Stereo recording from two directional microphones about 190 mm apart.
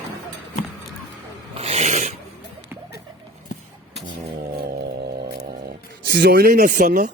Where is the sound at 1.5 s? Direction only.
30° right (ahead or behind).